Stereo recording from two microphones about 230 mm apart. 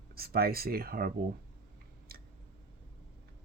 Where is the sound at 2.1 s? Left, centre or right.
Right.